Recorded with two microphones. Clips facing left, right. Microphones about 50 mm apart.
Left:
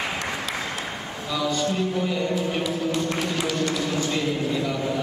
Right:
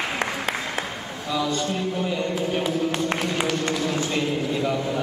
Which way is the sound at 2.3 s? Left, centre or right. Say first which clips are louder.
Right 1 dB; right.